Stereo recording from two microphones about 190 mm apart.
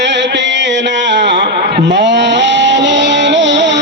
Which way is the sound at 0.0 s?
70° right (ahead or behind).